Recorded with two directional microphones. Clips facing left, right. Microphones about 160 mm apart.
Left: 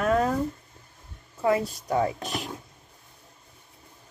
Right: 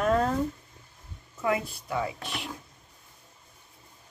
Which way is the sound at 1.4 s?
40° left (ahead or behind).